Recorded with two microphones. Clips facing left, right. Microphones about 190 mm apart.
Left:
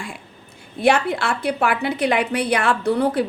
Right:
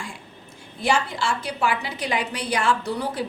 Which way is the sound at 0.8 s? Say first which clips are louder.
Left 6 dB; 60° left (ahead or behind).